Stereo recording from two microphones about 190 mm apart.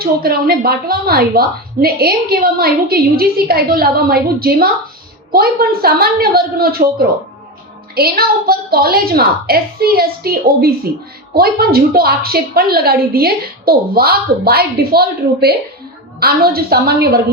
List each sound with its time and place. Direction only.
0.0 s a woman's voice: 55° right (ahead or behind)
7.9 s a woman's voice: 55° right (ahead or behind)